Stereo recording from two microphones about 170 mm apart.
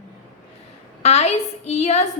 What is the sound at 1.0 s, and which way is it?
A woman's voice, 40° left (ahead or behind).